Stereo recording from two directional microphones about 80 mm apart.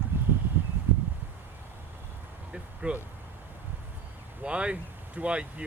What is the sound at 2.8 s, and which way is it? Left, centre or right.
Speech, centre.